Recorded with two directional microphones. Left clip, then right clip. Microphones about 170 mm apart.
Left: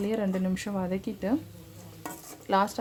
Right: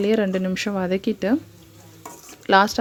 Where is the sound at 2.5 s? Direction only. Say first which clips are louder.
Right 9 dB; 30° right (ahead or behind).